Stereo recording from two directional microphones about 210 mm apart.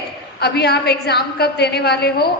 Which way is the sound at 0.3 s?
50° left (ahead or behind).